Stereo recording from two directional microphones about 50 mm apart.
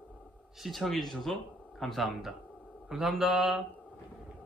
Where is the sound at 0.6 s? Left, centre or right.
Centre.